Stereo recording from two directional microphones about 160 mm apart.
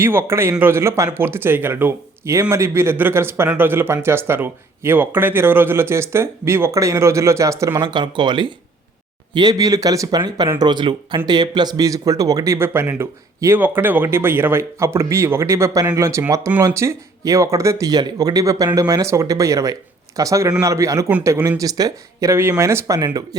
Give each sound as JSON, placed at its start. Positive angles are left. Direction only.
{"t": 0.0, "sound": "speech", "side_deg": -15}